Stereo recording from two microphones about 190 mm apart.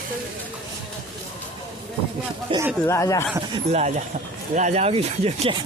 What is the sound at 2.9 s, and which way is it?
Speech, 15° left (ahead or behind).